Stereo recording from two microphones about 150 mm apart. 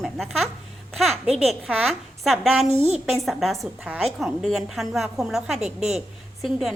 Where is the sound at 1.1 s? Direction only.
45° right (ahead or behind).